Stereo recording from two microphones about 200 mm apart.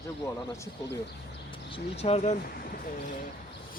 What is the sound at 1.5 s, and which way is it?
Speech, 30° left (ahead or behind).